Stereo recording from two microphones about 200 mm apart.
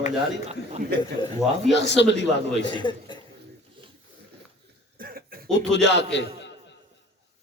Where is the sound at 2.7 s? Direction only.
25° left (ahead or behind).